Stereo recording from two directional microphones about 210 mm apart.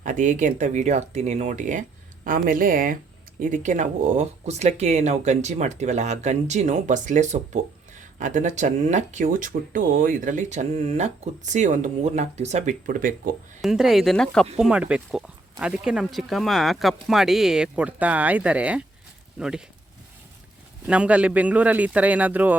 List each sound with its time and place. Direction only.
0.0 s speech: 35° right (ahead or behind)
13.6 s speech: centre (ahead or behind)
20.8 s a man's voice: 5° right (ahead or behind)